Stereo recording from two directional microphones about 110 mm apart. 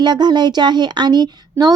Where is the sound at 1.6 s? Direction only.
20° right (ahead or behind).